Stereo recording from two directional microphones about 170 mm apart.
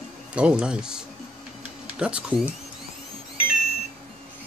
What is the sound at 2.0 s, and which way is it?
Music, 5° right (ahead or behind).